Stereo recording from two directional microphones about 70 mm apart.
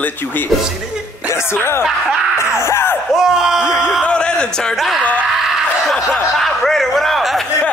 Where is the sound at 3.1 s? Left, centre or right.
Centre.